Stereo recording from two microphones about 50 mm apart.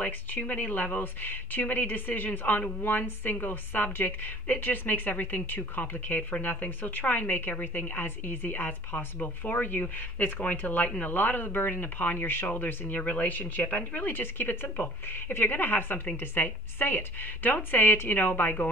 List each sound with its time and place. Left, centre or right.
0.0 s a woman's voice: left
13.0 s a woman's voice: left